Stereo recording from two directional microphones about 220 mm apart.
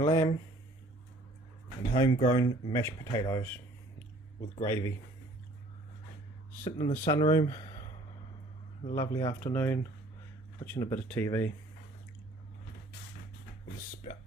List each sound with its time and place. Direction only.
0.0 s speech: 20° left (ahead or behind)
2.0 s speech: 20° left (ahead or behind)
4.6 s speech: 10° left (ahead or behind)
6.7 s speech: 20° left (ahead or behind)
6.9 s speech: 30° left (ahead or behind)
7.2 s speech: 15° left (ahead or behind)
9.0 s speech: 15° left (ahead or behind)